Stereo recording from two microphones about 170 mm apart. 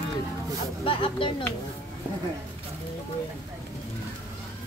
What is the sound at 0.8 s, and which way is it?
Speech, 30° left (ahead or behind).